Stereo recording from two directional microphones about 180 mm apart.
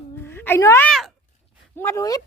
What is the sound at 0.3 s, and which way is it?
A child's voice, 10° left (ahead or behind).